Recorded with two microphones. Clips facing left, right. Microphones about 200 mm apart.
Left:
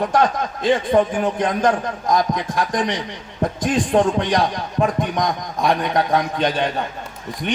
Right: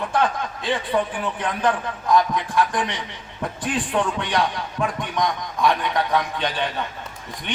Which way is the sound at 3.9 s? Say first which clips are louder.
Left 7 dB; 40° left (ahead or behind).